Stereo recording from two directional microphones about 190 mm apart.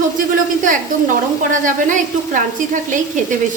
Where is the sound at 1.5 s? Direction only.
40° right (ahead or behind).